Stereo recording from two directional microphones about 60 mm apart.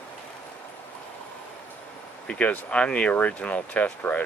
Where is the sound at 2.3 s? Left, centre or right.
Left.